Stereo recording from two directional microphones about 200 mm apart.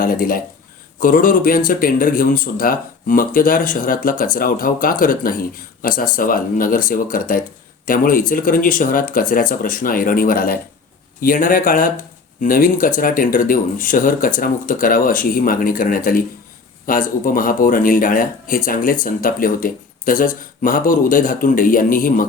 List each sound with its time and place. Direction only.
0.0 s speech: 45° left (ahead or behind)